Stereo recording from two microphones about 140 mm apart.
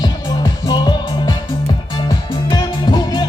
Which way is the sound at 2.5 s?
35° left (ahead or behind).